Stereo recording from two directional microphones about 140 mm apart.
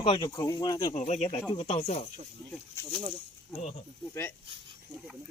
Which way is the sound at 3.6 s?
55° left (ahead or behind).